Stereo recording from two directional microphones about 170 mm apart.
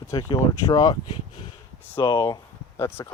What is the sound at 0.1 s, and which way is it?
Speech, 20° left (ahead or behind).